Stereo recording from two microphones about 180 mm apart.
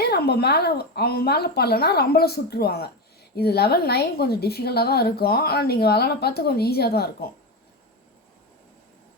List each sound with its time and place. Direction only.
0.0 s a woman's voice: 65° left (ahead or behind)